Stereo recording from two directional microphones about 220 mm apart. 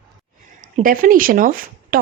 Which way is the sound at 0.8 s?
40° right (ahead or behind).